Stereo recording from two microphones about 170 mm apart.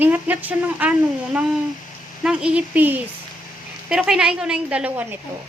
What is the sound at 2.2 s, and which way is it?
Speech, 5° right (ahead or behind).